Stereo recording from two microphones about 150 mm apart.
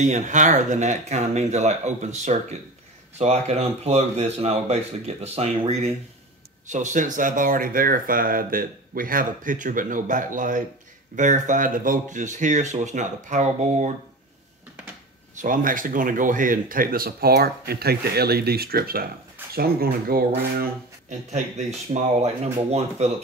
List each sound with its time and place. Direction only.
0.0 s speech: 50° right (ahead or behind)
6.7 s speech: 55° right (ahead or behind)
15.3 s speech: 60° right (ahead or behind); by 20.7 s 80° right
21.1 s speech: 50° right (ahead or behind)